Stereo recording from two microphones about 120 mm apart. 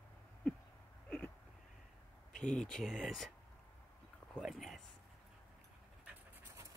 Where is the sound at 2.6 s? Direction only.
5° left (ahead or behind).